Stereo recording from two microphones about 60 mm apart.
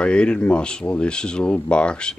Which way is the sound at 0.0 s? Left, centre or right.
Centre.